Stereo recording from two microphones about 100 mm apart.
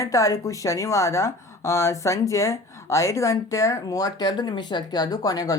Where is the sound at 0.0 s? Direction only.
35° left (ahead or behind).